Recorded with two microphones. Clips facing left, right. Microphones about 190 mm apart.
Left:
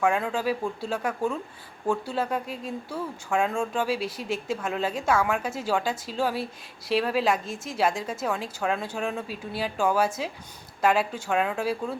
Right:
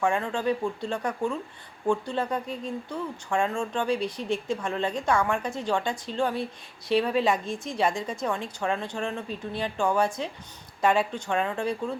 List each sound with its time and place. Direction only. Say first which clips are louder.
0.0 s speech: left 1 dB; 5° left (ahead or behind)